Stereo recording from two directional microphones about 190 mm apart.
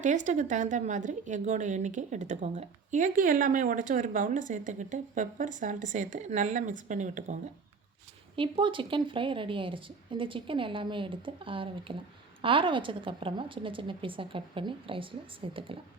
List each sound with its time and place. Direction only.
0.0 s a woman's voice: 40° right (ahead or behind)
8.4 s a woman's voice: 25° right (ahead or behind)